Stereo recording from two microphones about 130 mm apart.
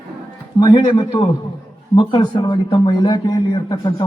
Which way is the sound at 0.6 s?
35° left (ahead or behind).